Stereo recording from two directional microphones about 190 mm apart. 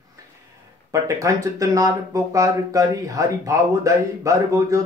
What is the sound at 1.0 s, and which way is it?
Speech, 15° right (ahead or behind).